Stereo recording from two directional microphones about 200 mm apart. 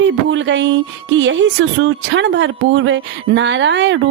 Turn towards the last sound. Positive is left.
turn(degrees=-65)  # may be behind; listen again after turning